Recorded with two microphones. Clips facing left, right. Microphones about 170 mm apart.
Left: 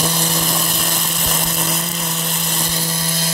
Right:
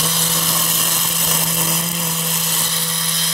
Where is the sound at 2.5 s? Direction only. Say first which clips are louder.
Left 4 dB; 35° left (ahead or behind).